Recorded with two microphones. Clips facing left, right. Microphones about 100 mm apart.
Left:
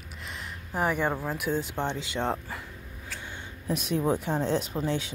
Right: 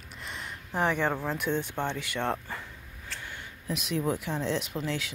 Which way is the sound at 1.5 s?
15° left (ahead or behind).